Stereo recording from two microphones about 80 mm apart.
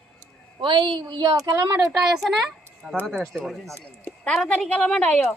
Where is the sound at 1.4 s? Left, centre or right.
Right.